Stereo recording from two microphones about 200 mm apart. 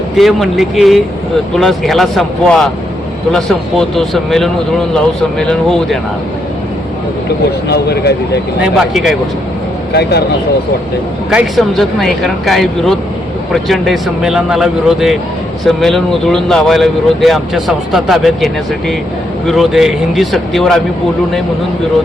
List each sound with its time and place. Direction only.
0.2 s speech: centre (ahead or behind)
7.7 s speech: 55° left (ahead or behind)
8.6 s speech: centre (ahead or behind)
9.9 s speech: 55° left (ahead or behind)
11.3 s speech: centre (ahead or behind)